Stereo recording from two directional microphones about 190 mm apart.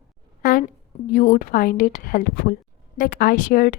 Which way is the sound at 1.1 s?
45° left (ahead or behind).